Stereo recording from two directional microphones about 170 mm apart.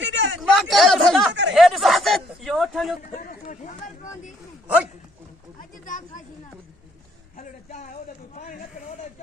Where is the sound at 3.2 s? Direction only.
50° left (ahead or behind).